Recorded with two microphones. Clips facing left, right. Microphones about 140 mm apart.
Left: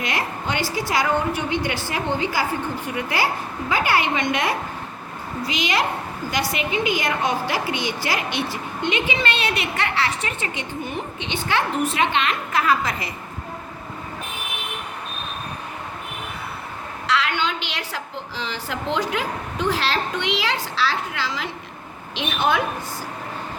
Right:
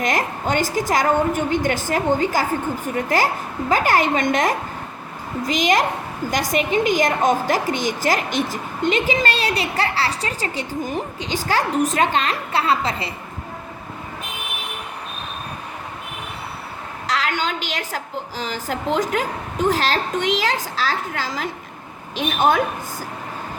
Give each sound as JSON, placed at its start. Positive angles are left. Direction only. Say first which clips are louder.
{"t": 0.0, "sound": "a woman's voice", "louder": "right 4 dB", "side_deg": -45}
{"t": 17.1, "sound": "a woman's voice", "louder": "even", "side_deg": -40}